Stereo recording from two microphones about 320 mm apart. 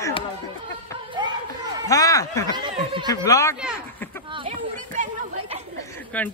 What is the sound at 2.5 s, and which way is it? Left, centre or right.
Speech, centre.